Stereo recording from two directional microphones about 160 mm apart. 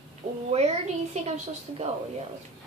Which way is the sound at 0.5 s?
45° right (ahead or behind).